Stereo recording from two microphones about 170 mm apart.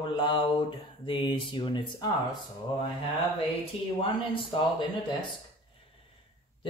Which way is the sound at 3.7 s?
35° left (ahead or behind).